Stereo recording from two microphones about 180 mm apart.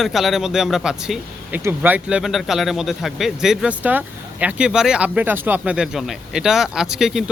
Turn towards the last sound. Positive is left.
turn(degrees=-5)  # may be behind; listen again after turning